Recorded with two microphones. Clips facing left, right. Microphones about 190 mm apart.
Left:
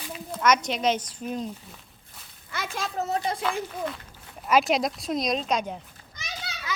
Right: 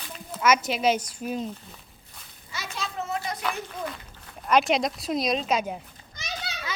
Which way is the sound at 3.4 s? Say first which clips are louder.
Left 3 dB; centre (ahead or behind).